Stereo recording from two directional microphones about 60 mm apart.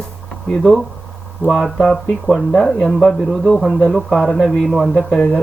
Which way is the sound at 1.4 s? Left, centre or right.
Centre.